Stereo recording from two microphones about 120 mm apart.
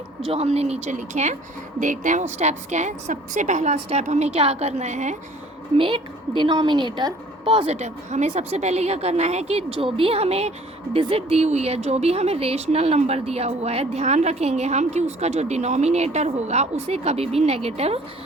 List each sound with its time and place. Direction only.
0.3 s a woman's voice: 60° right (ahead or behind); by 1.4 s 75° right (ahead or behind)
1.8 s speech: 90° right
2.4 s a woman's voice: 75° right (ahead or behind)
5.7 s a woman's voice: 45° right (ahead or behind)